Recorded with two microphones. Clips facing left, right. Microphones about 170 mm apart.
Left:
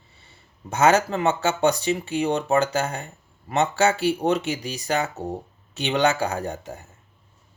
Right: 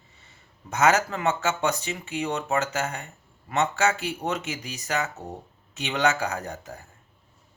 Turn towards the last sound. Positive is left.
turn(degrees=25)  # may be behind; listen again after turning